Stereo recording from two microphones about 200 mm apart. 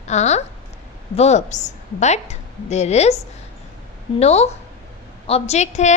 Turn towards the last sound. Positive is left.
turn(degrees=35)  # may be behind; listen again after turning